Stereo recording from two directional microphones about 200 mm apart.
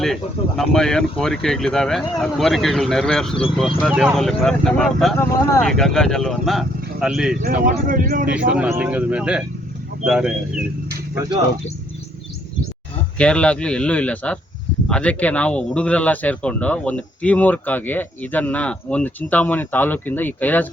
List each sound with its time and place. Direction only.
0.0 s speech: centre (ahead or behind)
7.4 s speech: 45° right (ahead or behind)
8.3 s speech: 5° right (ahead or behind)
13.1 s a man's voice: 5° left (ahead or behind)